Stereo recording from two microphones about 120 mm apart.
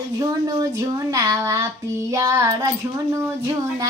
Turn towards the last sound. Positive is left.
turn(degrees=-25)  # may be behind; listen again after turning